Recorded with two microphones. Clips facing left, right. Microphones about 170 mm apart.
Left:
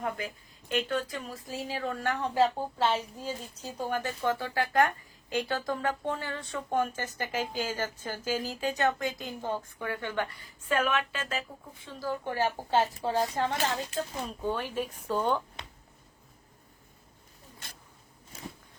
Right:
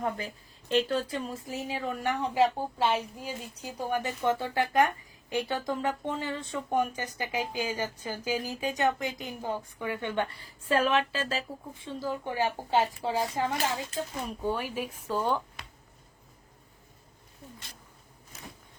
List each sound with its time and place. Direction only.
0.7 s a woman's voice: 30° right (ahead or behind)
10.4 s a woman's voice: 30° right (ahead or behind); by 15.4 s 5° right (ahead or behind)